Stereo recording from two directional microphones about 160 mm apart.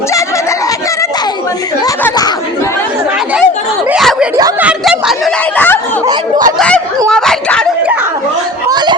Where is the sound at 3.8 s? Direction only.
Centre (ahead or behind).